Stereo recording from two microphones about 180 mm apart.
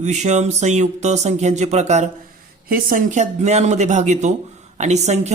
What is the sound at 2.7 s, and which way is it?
Speech, 50° right (ahead or behind).